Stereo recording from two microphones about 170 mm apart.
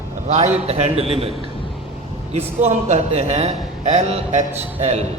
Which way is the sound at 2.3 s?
40° right (ahead or behind).